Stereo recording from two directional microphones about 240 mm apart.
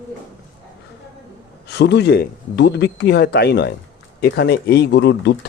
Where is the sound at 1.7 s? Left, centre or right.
Left.